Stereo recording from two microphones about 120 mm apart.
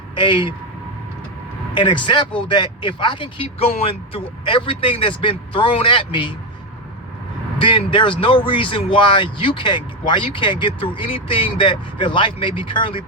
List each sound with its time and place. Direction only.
0.2 s speech: 45° left (ahead or behind)
1.7 s speech: 40° left (ahead or behind)
7.6 s speech: 45° left (ahead or behind)